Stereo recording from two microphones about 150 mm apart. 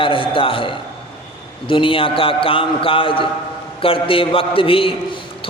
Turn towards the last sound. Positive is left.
turn(degrees=35)  # may be behind; listen again after turning